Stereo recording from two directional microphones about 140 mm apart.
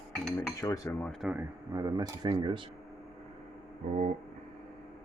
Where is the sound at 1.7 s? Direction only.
25° right (ahead or behind).